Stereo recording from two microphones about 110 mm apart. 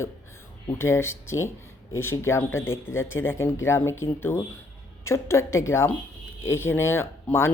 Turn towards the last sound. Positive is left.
turn(degrees=20)  # may be behind; listen again after turning